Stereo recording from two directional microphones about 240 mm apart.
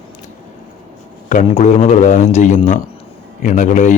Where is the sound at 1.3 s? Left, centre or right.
Left.